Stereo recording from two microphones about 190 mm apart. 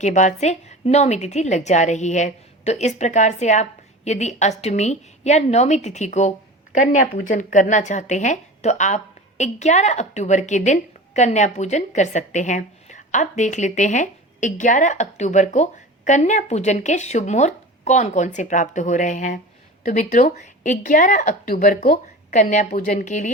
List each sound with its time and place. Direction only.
0.0 s a woman's voice: 40° left (ahead or behind)